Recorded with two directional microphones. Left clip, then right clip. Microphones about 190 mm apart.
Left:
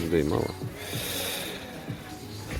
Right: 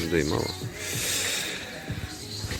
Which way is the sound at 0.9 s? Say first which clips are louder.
Right 4 dB; 15° left (ahead or behind).